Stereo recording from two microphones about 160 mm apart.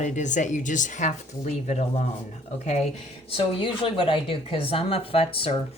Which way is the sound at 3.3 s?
35° left (ahead or behind).